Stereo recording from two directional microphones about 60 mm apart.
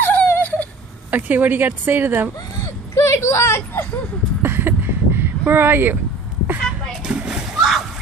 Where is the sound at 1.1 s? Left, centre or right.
Right.